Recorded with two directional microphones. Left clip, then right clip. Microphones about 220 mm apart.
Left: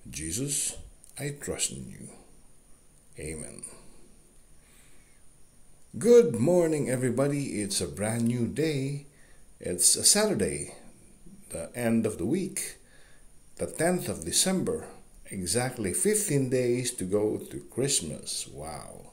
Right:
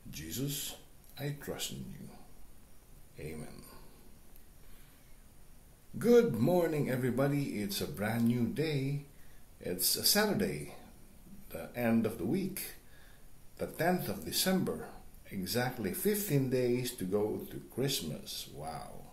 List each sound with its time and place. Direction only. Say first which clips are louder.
0.1 s speech: left 6 dB; 35° left (ahead or behind)
3.2 s speech: left 6 dB; 30° left (ahead or behind)
5.9 s speech: left 7 dB; 35° left (ahead or behind)